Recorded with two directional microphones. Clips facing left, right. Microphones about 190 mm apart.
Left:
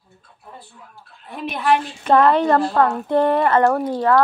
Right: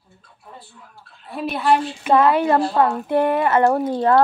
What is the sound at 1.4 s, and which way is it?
A woman's voice, 5° right (ahead or behind).